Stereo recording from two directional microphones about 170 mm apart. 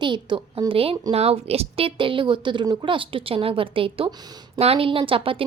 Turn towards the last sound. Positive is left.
turn(degrees=-30)  # may be behind; listen again after turning